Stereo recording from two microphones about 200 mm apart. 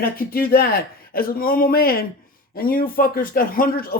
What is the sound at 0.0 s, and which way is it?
Speech, 50° left (ahead or behind).